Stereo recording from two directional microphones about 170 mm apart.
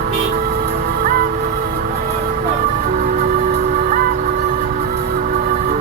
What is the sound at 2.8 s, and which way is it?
Music, 55° right (ahead or behind).